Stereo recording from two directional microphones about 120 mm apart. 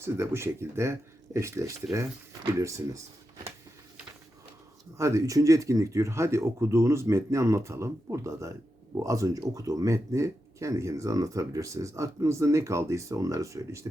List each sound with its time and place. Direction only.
0.0 s speech: 20° right (ahead or behind)
4.9 s speech: 25° right (ahead or behind)